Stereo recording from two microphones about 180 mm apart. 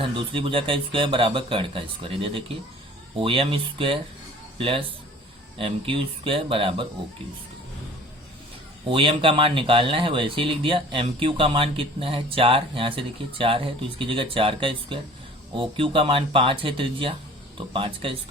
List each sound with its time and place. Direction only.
0.0 s speech: 30° right (ahead or behind)
8.9 s speech: 30° right (ahead or behind)